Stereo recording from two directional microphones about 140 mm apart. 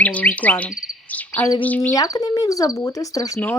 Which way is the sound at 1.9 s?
25° left (ahead or behind).